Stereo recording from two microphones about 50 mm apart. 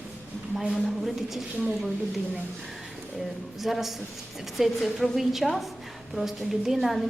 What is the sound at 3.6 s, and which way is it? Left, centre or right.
A woman's voice, centre.